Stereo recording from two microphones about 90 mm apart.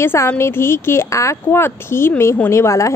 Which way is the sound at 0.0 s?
25° left (ahead or behind).